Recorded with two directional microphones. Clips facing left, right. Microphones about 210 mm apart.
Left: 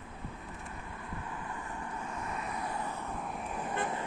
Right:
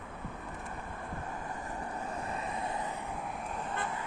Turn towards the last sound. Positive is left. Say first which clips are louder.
# left 3 dB
turn(degrees=20)  # may be behind; listen again after turning